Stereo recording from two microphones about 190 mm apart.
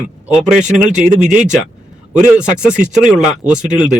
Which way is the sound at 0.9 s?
40° right (ahead or behind).